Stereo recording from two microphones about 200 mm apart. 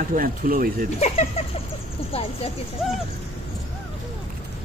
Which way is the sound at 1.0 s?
30° left (ahead or behind).